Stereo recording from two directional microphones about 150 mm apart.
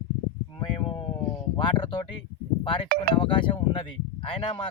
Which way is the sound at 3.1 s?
35° left (ahead or behind).